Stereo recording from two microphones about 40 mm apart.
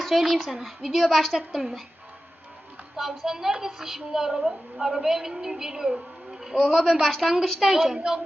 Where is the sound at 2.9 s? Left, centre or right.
Centre.